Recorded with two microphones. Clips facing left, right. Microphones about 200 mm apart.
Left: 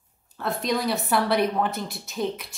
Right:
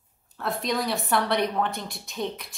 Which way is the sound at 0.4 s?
Centre (ahead or behind).